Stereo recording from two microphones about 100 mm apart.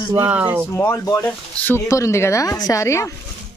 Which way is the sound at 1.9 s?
30° left (ahead or behind).